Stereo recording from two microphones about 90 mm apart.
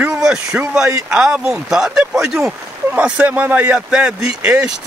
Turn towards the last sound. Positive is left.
turn(degrees=-10)  # may be behind; listen again after turning